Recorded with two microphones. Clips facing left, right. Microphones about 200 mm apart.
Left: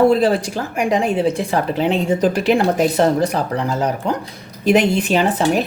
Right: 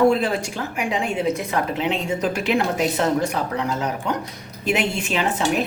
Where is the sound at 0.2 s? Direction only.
35° left (ahead or behind).